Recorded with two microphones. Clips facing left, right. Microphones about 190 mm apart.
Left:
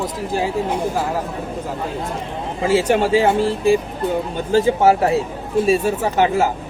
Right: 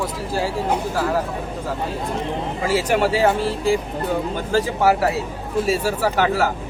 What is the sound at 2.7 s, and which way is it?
A man's voice, 25° left (ahead or behind).